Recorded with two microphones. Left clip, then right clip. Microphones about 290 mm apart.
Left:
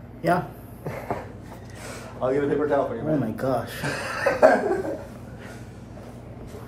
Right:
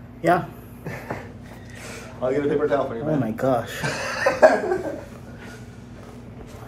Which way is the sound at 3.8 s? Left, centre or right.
Right.